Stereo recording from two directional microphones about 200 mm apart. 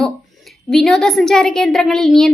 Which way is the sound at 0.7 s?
Centre (ahead or behind).